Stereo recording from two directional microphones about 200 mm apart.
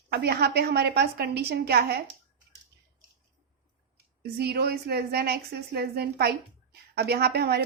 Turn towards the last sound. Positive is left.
turn(degrees=-55)  # may be behind; listen again after turning